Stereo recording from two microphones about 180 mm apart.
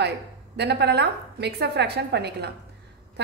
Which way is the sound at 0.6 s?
70° right (ahead or behind).